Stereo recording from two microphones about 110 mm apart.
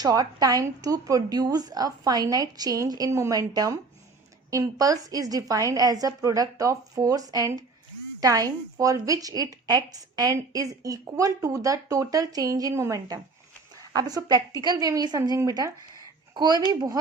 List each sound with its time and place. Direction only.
0.0 s a woman's voice: 35° right (ahead or behind)